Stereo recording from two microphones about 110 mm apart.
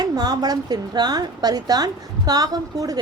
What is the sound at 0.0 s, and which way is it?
A woman's voice, 35° right (ahead or behind).